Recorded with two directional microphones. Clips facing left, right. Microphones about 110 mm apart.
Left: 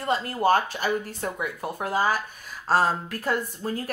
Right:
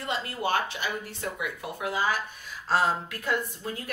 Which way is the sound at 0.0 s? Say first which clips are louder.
Left 6 dB; 40° left (ahead or behind).